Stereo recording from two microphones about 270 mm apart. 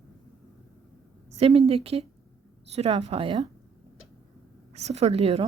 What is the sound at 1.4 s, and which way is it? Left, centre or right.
A woman's voice, right.